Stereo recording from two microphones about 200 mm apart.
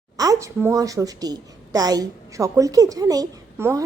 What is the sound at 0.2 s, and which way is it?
A woman's voice, 15° right (ahead or behind).